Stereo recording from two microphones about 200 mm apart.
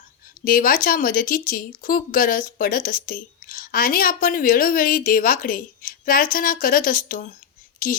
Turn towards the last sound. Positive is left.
turn(degrees=45)  # may be behind; listen again after turning